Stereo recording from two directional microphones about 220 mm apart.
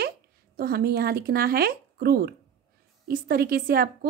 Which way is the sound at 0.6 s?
45° right (ahead or behind).